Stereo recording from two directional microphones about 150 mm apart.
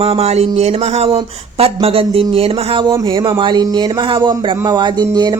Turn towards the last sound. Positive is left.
turn(degrees=-25)  # may be behind; listen again after turning